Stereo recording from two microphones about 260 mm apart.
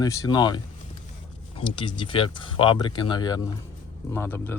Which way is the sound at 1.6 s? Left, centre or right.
Centre.